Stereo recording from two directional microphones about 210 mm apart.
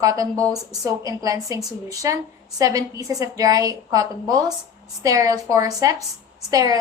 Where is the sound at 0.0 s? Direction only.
15° right (ahead or behind).